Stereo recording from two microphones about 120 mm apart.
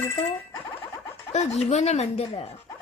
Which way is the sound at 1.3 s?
70° left (ahead or behind).